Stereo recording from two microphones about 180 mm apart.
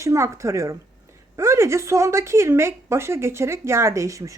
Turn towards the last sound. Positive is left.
turn(degrees=-15)  # may be behind; listen again after turning